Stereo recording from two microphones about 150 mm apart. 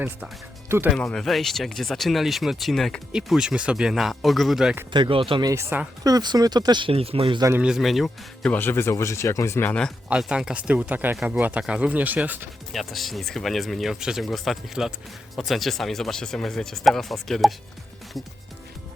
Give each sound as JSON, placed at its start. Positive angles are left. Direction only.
{"t": 0.9, "sound": "speech", "side_deg": 5}
{"t": 4.9, "sound": "speech", "side_deg": -35}
{"t": 5.5, "sound": "speech", "side_deg": -20}
{"t": 7.6, "sound": "speech", "side_deg": 0}
{"t": 8.5, "sound": "speech", "side_deg": 15}
{"t": 10.1, "sound": "speech", "side_deg": -5}
{"t": 12.7, "sound": "speech", "side_deg": 0}